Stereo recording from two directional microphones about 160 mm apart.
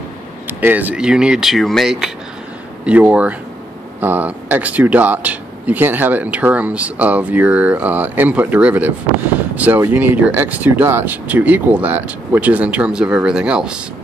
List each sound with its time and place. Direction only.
0.5 s speech: 10° right (ahead or behind)